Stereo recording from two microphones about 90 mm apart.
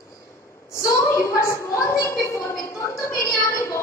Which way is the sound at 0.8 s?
35° left (ahead or behind).